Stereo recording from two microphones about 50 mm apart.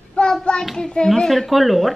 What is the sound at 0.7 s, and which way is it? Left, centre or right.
A child's voice, centre.